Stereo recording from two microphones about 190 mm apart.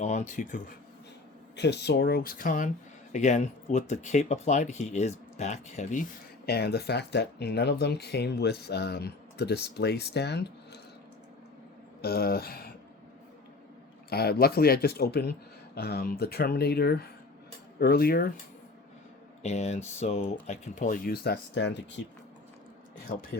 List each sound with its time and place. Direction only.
0.0 s speech: 40° left (ahead or behind)
1.5 s speech: 65° left (ahead or behind)
12.0 s speech: 55° left (ahead or behind)
14.1 s speech: 55° left (ahead or behind)
19.4 s speech: 35° left (ahead or behind); by 22.0 s 65° left (ahead or behind)
23.1 s speech: 45° left (ahead or behind)